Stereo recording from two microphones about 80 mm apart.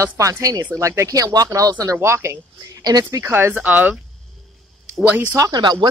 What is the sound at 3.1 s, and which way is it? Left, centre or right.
Speech, right.